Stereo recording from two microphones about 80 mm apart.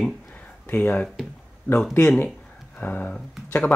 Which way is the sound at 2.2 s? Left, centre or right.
Left.